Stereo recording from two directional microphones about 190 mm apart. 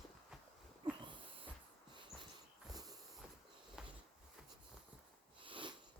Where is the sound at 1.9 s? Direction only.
25° right (ahead or behind).